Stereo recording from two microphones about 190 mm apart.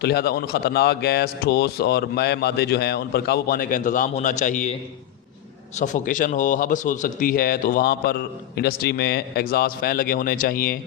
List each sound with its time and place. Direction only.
0.0 s a man's voice: 55° left (ahead or behind); by 4.8 s 40° left (ahead or behind)
5.8 s a man's voice: 40° left (ahead or behind)